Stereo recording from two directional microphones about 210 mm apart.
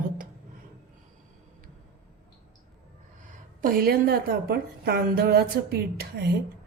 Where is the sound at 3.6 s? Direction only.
45° right (ahead or behind).